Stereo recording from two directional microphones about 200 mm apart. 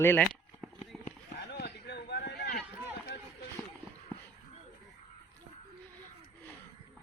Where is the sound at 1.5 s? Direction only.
55° left (ahead or behind).